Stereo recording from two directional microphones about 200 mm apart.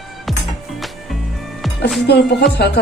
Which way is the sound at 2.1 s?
55° left (ahead or behind).